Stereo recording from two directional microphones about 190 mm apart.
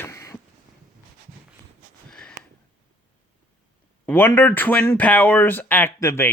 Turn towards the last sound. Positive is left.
turn(degrees=15)  # may be behind; listen again after turning